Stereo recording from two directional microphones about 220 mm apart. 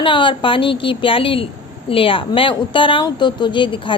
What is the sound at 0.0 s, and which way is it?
A woman's voice, 20° left (ahead or behind).